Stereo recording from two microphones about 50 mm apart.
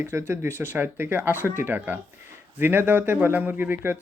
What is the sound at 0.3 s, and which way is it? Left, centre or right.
Speech, right.